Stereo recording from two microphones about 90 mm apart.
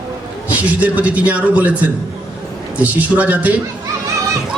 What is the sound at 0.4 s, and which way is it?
A man's voice, 20° right (ahead or behind).